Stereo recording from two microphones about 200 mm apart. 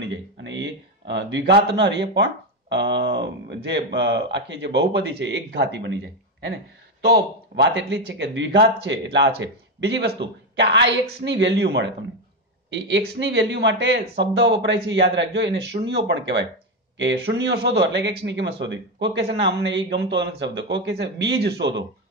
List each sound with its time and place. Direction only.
0.0 s a sound: 65° right (ahead or behind)
2.7 s speech: 60° right (ahead or behind)
7.0 s speech: 55° right (ahead or behind)